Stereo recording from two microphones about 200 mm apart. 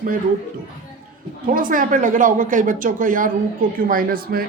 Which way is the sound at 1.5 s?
45° right (ahead or behind).